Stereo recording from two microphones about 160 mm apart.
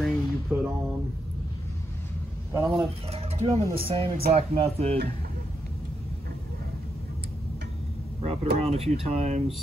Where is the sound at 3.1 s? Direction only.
40° right (ahead or behind).